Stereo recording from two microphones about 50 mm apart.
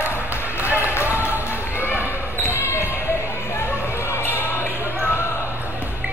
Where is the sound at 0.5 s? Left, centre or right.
Right.